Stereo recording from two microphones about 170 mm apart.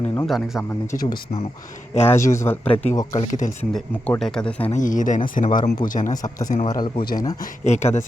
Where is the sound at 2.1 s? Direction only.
15° left (ahead or behind).